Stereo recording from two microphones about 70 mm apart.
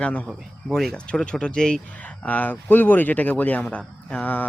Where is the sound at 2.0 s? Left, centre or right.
Left.